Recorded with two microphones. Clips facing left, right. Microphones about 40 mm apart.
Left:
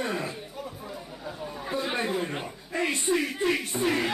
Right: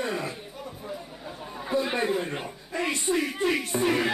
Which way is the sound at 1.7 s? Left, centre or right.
Centre.